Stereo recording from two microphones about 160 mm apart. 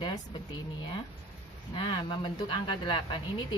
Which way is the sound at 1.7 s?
30° left (ahead or behind).